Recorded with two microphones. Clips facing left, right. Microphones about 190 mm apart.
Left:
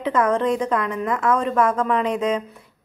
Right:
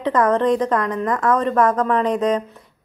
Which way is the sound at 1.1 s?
35° right (ahead or behind).